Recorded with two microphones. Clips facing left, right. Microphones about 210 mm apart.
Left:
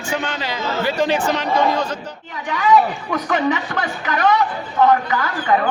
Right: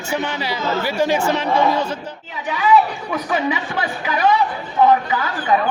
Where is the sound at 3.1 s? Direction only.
10° right (ahead or behind).